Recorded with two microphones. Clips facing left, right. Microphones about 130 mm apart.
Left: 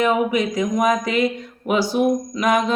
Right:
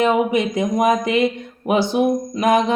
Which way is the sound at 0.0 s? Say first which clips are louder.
Right 2 dB; 25° right (ahead or behind).